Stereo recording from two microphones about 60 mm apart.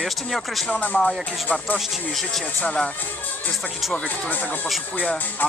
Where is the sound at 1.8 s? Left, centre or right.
Centre.